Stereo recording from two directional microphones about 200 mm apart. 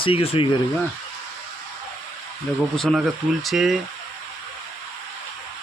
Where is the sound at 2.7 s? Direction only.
Centre (ahead or behind).